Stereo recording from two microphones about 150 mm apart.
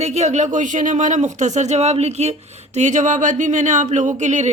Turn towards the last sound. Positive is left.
turn(degrees=-50)  # may be behind; listen again after turning